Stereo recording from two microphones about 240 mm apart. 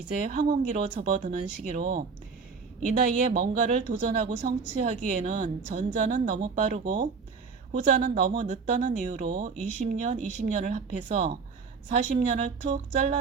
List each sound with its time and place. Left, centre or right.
0.3 s speech: right